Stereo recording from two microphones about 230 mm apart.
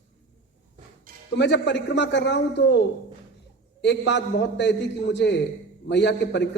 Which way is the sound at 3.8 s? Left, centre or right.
Left.